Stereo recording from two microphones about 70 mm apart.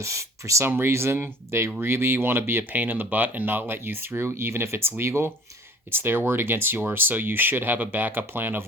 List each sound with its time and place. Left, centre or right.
0.0 s speech: right